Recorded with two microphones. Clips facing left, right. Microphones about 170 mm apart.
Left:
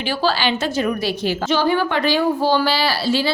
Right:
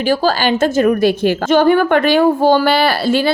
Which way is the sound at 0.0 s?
45° right (ahead or behind).